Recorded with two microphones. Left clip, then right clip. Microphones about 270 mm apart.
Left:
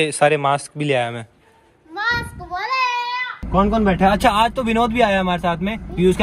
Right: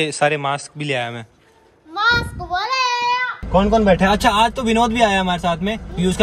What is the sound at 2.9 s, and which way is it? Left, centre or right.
Child singing, right.